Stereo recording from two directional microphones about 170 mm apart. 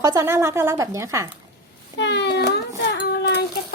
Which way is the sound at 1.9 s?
90° left.